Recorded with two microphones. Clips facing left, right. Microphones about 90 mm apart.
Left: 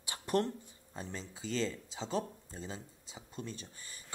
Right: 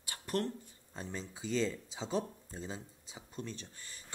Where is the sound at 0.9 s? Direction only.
Centre (ahead or behind).